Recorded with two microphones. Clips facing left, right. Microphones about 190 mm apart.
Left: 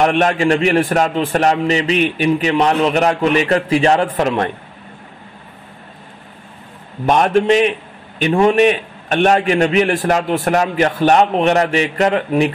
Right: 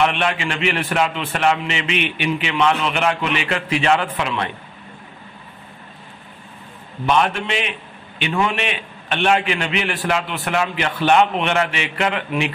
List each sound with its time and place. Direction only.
0.0 s a man's voice: 45° left (ahead or behind)
7.1 s a man's voice: 45° left (ahead or behind)